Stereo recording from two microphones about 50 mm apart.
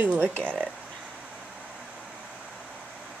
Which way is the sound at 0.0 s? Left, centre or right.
Right.